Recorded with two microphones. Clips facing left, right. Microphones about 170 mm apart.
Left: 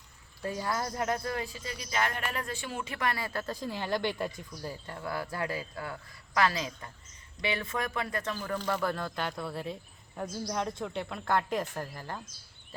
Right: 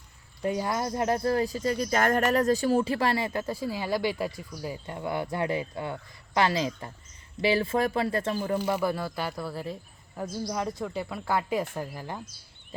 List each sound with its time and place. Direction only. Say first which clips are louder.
0.4 s speech: right 5 dB; 20° right (ahead or behind)
8.5 s speech: right 2 dB; 10° right (ahead or behind)